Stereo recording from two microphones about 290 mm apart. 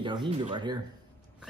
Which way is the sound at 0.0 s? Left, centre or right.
Centre.